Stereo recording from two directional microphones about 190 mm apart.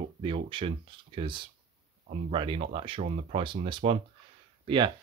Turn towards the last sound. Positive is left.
turn(degrees=-25)  # may be behind; listen again after turning